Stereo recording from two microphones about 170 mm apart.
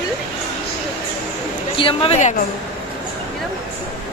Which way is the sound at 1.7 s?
30° left (ahead or behind).